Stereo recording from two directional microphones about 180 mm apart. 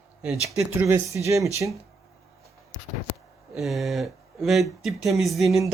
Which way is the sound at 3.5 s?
Centre (ahead or behind).